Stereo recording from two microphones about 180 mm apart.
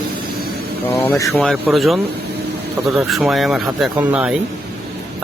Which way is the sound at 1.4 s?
Centre (ahead or behind).